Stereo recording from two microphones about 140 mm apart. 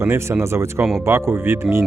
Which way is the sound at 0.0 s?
20° right (ahead or behind).